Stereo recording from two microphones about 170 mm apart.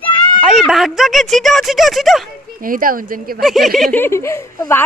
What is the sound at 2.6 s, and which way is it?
Speech, 55° right (ahead or behind).